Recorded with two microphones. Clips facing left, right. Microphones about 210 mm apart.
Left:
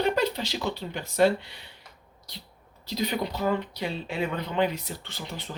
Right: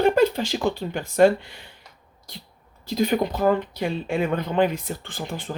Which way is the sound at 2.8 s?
50° right (ahead or behind).